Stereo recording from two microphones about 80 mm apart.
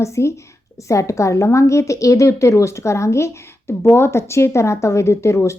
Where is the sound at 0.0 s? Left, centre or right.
Left.